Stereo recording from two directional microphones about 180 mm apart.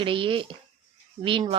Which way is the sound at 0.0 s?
30° right (ahead or behind).